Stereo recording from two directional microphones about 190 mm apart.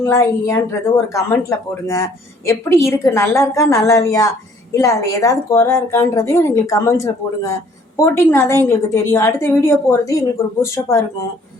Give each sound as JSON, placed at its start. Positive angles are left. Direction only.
{"t": 0.0, "sound": "speech", "side_deg": 15}